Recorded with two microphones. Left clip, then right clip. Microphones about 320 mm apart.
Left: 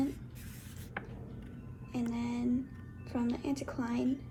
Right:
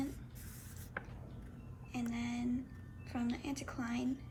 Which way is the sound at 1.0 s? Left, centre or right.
Centre.